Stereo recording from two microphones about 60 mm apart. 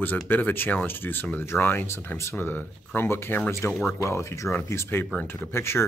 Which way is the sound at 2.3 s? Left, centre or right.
Left.